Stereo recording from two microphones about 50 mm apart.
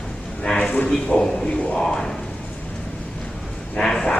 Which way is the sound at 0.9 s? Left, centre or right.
Centre.